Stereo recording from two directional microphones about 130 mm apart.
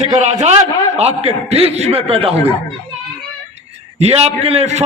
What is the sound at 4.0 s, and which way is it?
Speech, 55° right (ahead or behind).